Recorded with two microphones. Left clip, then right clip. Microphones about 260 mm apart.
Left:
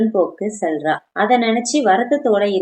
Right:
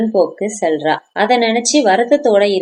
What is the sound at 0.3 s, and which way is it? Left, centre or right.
Speech, right.